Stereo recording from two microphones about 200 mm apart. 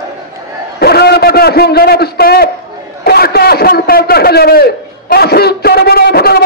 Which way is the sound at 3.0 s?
50° left (ahead or behind).